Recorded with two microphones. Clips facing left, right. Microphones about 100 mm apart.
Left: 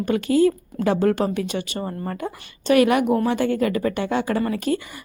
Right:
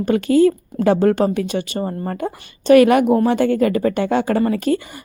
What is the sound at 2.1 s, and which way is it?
Speech, 40° right (ahead or behind).